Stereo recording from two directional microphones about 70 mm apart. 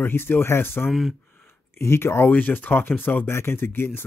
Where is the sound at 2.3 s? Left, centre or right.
Left.